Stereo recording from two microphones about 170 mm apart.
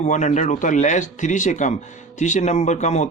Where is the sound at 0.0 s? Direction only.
45° left (ahead or behind).